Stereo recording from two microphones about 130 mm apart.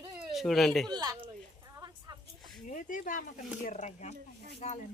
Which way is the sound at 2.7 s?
90° left.